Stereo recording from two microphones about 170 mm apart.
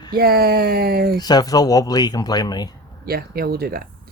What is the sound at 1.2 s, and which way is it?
Speech, 25° left (ahead or behind).